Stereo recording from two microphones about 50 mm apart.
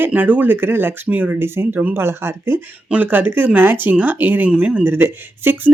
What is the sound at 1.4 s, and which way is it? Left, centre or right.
Speech, right.